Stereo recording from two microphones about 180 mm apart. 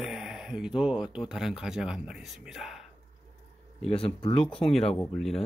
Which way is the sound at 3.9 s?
30° left (ahead or behind).